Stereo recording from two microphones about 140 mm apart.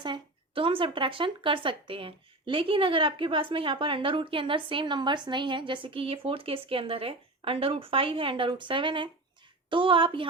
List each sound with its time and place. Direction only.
0.0 s speech: 35° right (ahead or behind)